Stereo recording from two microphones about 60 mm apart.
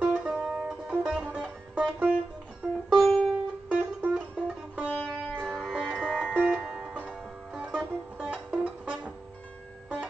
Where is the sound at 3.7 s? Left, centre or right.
Right.